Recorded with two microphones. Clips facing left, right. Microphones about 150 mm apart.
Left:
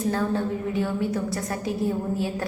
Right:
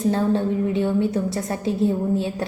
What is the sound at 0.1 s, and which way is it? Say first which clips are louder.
A woman's voice: right 5 dB; 25° right (ahead or behind).